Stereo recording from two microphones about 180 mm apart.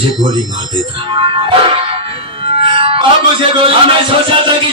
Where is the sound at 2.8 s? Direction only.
30° right (ahead or behind).